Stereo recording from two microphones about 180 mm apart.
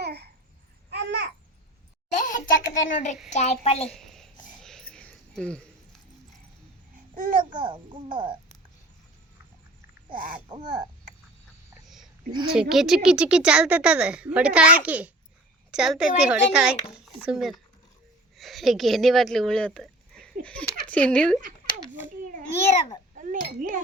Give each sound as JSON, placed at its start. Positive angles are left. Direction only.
{"t": 0.0, "sound": "babbling", "side_deg": -65}
{"t": 2.1, "sound": "a sound", "side_deg": 45}
{"t": 3.2, "sound": "a woman's voice", "side_deg": 40}
{"t": 3.8, "sound": "a sound", "side_deg": 0}
{"t": 7.2, "sound": "a child's voice", "side_deg": -50}
{"t": 7.5, "sound": "speech", "side_deg": -25}
{"t": 10.5, "sound": "speech", "side_deg": -25}
{"t": 12.5, "sound": "speech", "side_deg": 0}
{"t": 22.3, "sound": "babbling", "side_deg": -45}
{"t": 23.1, "sound": "speech", "side_deg": -45}